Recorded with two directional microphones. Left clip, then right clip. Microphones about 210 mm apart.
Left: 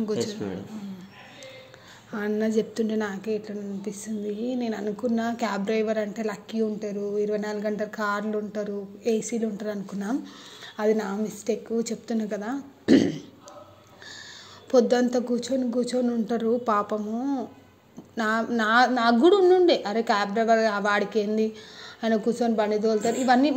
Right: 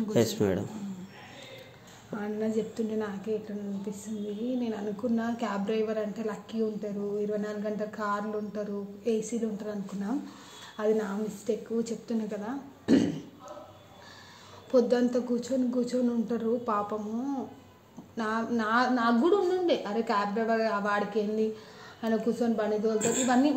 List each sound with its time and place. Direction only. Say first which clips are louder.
0.1 s speech: right 5 dB; 55° right (ahead or behind)
2.1 s a woman's voice: left 6 dB; 30° left (ahead or behind)
14.7 s a woman's voice: left 4 dB; 25° left (ahead or behind)